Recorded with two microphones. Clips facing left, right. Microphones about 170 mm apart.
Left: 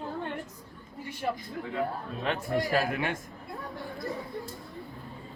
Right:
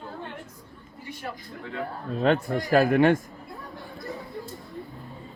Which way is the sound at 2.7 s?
50° right (ahead or behind).